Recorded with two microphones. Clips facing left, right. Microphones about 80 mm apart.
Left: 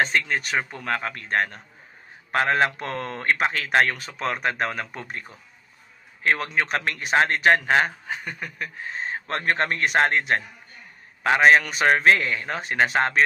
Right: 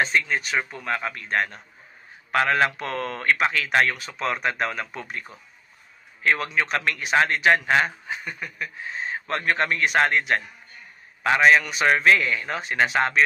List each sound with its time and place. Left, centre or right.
0.0 s a man's voice: left
2.3 s a man's voice: left
6.2 s a man's voice: left